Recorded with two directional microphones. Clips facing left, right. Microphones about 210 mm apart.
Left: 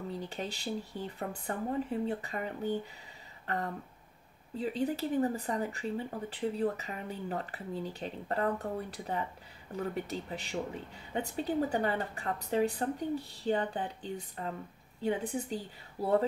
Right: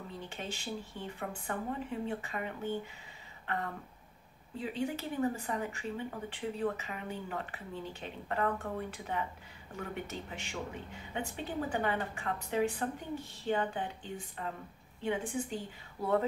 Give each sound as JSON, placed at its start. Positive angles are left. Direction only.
{"t": 0.2, "sound": "speech", "side_deg": 35}
{"t": 3.4, "sound": "a sound", "side_deg": 35}
{"t": 4.6, "sound": "speech", "side_deg": 35}